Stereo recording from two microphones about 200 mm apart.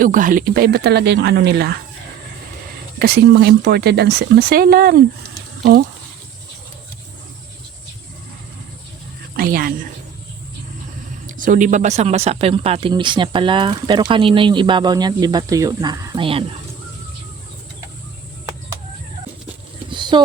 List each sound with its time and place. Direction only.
0.0 s speech: 40° right (ahead or behind)
3.0 s speech: 55° right (ahead or behind)
9.3 s a woman's voice: 45° right (ahead or behind)
11.3 s speech: 40° right (ahead or behind); by 16.4 s 25° right (ahead or behind)
19.9 s a sound: 25° right (ahead or behind)